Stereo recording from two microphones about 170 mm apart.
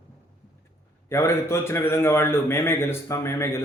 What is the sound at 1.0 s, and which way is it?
A man's voice, 15° left (ahead or behind).